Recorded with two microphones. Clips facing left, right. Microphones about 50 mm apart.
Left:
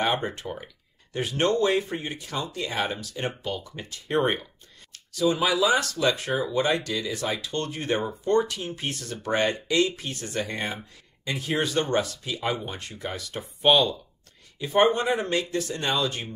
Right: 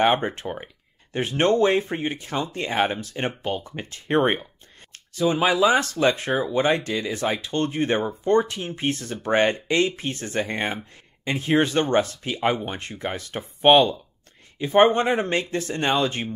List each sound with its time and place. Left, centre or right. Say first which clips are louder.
0.0 s speech: right 6 dB; right